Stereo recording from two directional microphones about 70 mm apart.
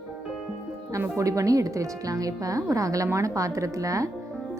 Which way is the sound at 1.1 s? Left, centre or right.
Right.